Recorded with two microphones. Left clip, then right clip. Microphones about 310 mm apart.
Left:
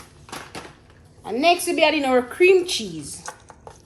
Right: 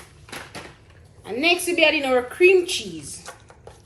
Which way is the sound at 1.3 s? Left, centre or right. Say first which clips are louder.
Left 3 dB; left.